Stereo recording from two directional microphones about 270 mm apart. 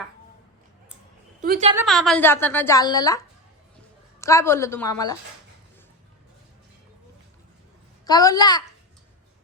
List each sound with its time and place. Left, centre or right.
1.4 s a woman's voice: right
1.7 s a woman's voice: centre
4.2 s a woman's voice: centre
8.0 s a woman's voice: centre